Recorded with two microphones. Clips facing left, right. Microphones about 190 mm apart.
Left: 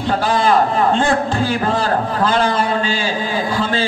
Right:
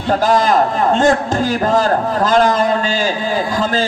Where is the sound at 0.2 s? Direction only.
40° right (ahead or behind).